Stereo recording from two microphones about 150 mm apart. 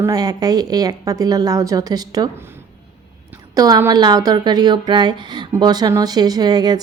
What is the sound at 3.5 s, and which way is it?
A woman's voice, 25° right (ahead or behind).